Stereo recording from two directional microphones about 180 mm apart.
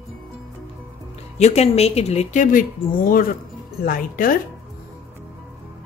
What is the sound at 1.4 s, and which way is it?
Speech, 35° left (ahead or behind).